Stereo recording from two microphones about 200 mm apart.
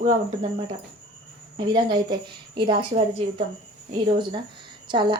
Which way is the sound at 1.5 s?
20° right (ahead or behind).